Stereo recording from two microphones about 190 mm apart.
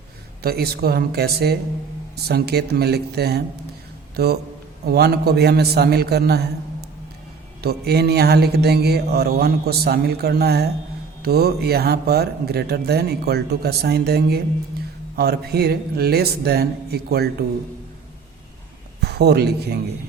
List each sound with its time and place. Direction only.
0.4 s a man's voice: 55° right (ahead or behind)
7.6 s speech: 55° right (ahead or behind)
18.9 s speech: 60° right (ahead or behind)